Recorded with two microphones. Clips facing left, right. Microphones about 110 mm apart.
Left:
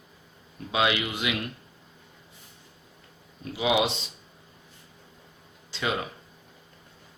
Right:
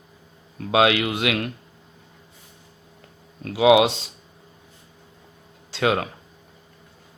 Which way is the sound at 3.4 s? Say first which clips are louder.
Right 9 dB; 80° right.